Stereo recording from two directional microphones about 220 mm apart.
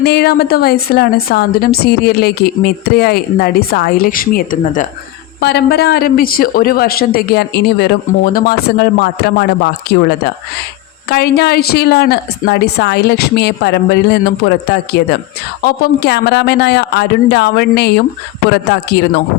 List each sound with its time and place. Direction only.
0.0 s a man's voice: 45° left (ahead or behind)